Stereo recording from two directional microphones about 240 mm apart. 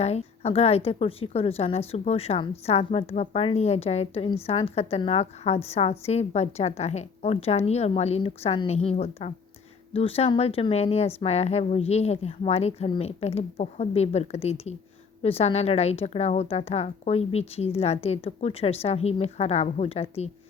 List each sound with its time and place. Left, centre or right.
0.0 s a woman's voice: left